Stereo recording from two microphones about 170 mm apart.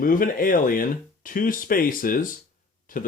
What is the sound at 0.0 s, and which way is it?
Speech, 55° left (ahead or behind).